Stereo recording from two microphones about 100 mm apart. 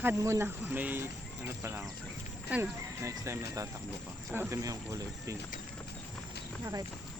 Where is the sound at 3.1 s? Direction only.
30° right (ahead or behind).